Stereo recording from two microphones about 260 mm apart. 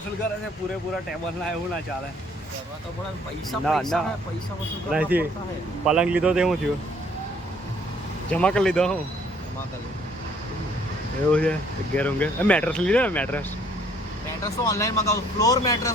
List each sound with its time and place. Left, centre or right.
3.5 s speech: centre
8.3 s speech: centre
11.3 s speech: centre
14.7 s a man's voice: centre